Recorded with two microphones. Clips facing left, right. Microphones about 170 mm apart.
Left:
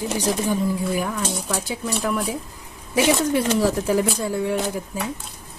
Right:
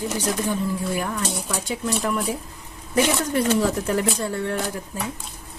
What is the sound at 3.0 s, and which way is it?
Speech, 15° left (ahead or behind).